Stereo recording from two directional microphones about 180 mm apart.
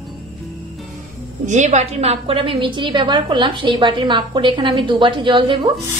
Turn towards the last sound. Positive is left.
turn(degrees=-25)  # may be behind; listen again after turning